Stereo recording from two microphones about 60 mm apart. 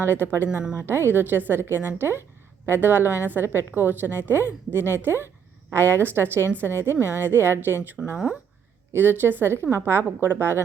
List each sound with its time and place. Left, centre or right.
0.1 s a woman's voice: right
6.9 s speech: left
7.3 s a woman's voice: right
8.1 s speech: centre
8.9 s a woman's voice: right